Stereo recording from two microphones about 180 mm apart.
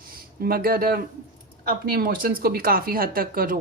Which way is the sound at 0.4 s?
55° right (ahead or behind).